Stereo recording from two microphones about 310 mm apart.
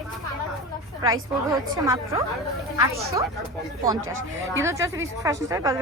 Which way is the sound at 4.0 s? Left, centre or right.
Right.